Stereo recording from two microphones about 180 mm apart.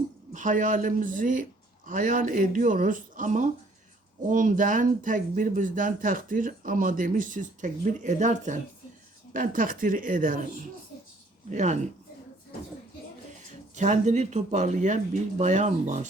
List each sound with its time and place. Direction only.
0.3 s speech: 45° right (ahead or behind)
11.4 s speech: 40° right (ahead or behind)
13.7 s speech: 40° right (ahead or behind)